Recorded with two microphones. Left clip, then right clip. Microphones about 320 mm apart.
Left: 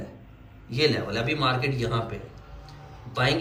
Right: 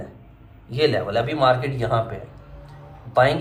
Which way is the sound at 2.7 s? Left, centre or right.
Centre.